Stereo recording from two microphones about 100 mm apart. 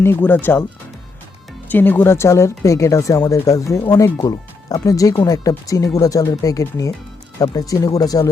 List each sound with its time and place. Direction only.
0.0 s speech: 20° left (ahead or behind)
1.6 s speech: 20° left (ahead or behind); by 8.3 s 40° left (ahead or behind)